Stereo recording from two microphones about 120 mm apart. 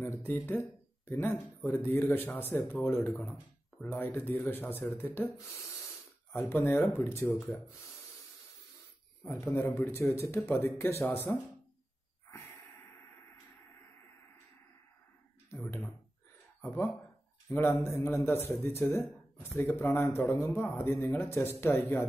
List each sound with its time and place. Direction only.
0.0 s speech: 15° left (ahead or behind)
9.2 s speech: 20° left (ahead or behind)
15.6 s a sound: 15° left (ahead or behind)
16.6 s speech: 20° left (ahead or behind)